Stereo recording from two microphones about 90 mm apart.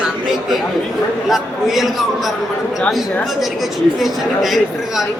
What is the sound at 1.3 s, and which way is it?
A woman's voice, 5° right (ahead or behind).